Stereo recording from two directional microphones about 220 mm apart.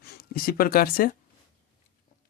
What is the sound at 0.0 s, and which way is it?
Speech, 45° left (ahead or behind).